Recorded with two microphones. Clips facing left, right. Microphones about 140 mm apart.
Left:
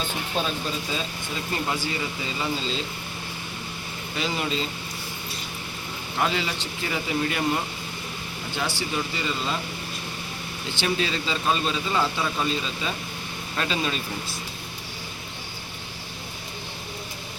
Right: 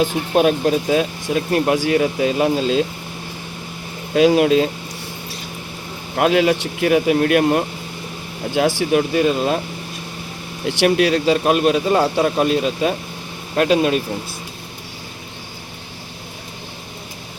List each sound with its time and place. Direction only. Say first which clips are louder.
0.0 s speech: right 12 dB; 65° right (ahead or behind)
4.1 s speech: right 15 dB; 80° right
6.1 s speech: right 12 dB; 75° right (ahead or behind)
8.5 s speech: right 13 dB; 90° right; by 9.6 s 70° right (ahead or behind)
10.8 s speech: right 11 dB; 70° right (ahead or behind)